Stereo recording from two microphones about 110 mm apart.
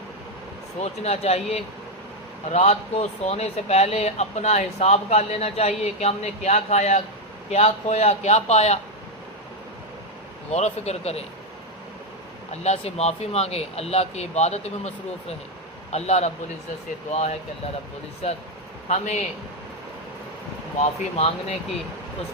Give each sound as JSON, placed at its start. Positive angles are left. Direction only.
{"t": 0.8, "sound": "speech", "side_deg": 70}
{"t": 2.5, "sound": "speech", "side_deg": 85}
{"t": 7.5, "sound": "a man's voice", "side_deg": 80}
{"t": 10.5, "sound": "a man's voice", "side_deg": 90}
{"t": 12.5, "sound": "a man's voice", "side_deg": 85}
{"t": 18.2, "sound": "speech", "side_deg": 75}
{"t": 18.9, "sound": "speech", "side_deg": 90}
{"t": 20.7, "sound": "speech", "side_deg": 90}